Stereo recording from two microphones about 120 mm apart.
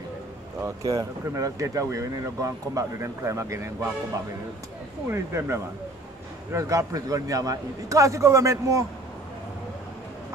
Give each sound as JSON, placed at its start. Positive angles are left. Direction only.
{"t": 0.6, "sound": "speech", "side_deg": -25}
{"t": 5.1, "sound": "speech", "side_deg": -20}